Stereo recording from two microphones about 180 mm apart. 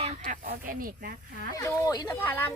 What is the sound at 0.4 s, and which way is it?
Speech, 50° right (ahead or behind).